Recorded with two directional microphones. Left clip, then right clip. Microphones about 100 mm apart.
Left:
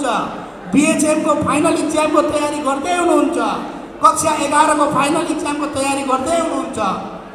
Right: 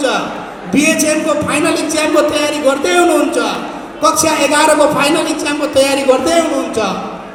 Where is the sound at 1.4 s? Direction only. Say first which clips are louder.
Right 2 dB; 20° right (ahead or behind).